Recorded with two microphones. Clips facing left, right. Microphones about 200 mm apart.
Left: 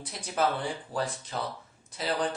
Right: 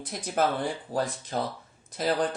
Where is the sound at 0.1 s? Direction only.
50° right (ahead or behind).